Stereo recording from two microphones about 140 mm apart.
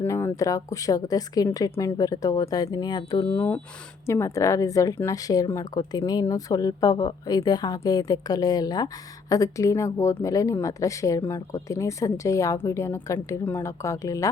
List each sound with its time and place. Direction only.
0.0 s speech: 15° left (ahead or behind)
3.3 s speech: 15° left (ahead or behind)